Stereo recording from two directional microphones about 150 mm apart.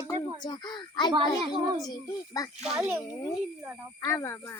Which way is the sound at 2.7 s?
15° right (ahead or behind).